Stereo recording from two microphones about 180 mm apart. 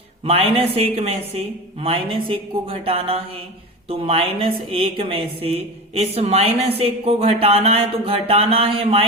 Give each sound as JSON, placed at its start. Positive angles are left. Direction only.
{"t": 0.3, "sound": "a woman's voice", "side_deg": -30}